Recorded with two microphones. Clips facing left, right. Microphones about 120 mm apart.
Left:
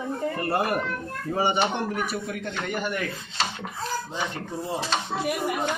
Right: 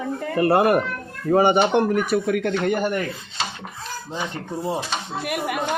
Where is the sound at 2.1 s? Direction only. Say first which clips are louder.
Right 10 dB; 65° right (ahead or behind).